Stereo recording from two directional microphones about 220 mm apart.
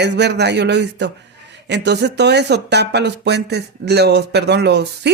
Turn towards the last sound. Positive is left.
turn(degrees=-50)  # may be behind; listen again after turning